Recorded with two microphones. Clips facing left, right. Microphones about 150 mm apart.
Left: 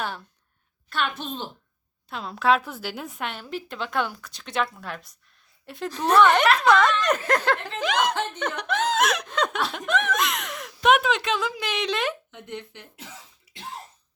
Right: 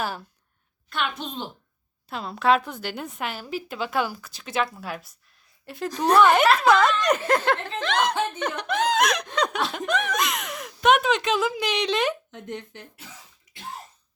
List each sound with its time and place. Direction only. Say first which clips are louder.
0.0 s a woman's voice: right 2 dB; 5° right (ahead or behind)
2.0 s speech: right 1 dB; centre (ahead or behind)
7.8 s speech: even; 10° left (ahead or behind)
8.4 s speech: right 1 dB; 5° right (ahead or behind)
12.3 s speech: right 2 dB; 40° right (ahead or behind)
13.5 s cough: left 3 dB; 10° left (ahead or behind)